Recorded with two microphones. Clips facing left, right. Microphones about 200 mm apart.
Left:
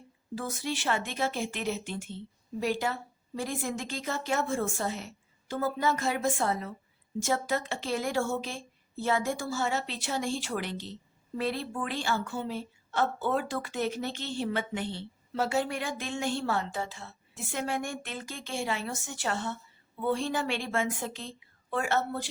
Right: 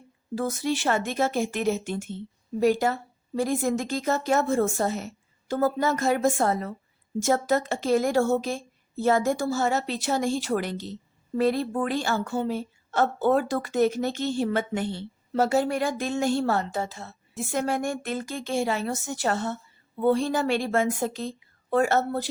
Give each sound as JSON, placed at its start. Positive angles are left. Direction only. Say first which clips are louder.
{"t": 0.3, "sound": "a woman's voice", "louder": "right 7 dB", "side_deg": -40}